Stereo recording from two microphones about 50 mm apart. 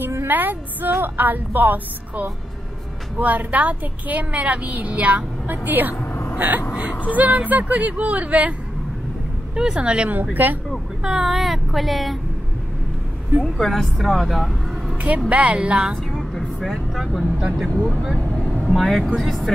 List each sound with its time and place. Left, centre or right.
0.3 s a woman's voice: right
9.6 s a woman's voice: centre
10.3 s a woman's voice: right
11.1 s speech: centre
13.6 s a woman's voice: centre
15.0 s a woman's voice: right
16.2 s vehicle: centre
17.8 s speech: centre